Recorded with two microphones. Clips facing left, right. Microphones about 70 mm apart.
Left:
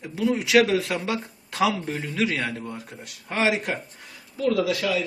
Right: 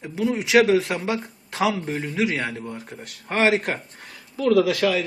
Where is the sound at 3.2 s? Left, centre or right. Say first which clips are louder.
Right 3 dB; right.